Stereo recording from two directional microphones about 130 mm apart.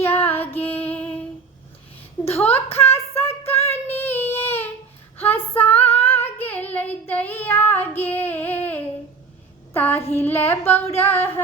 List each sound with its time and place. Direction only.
0.0 s female singing: 15° left (ahead or behind)
2.3 s child singing: 15° left (ahead or behind)
2.8 s female singing: 20° left (ahead or behind)
6.0 s child singing: 15° left (ahead or behind)